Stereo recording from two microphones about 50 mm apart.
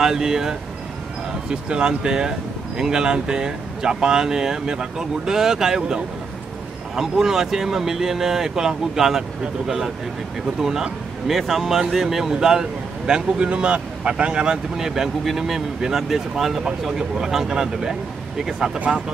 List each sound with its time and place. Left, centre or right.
0.0 s speech: centre
14.9 s speech: centre
18.8 s speech: right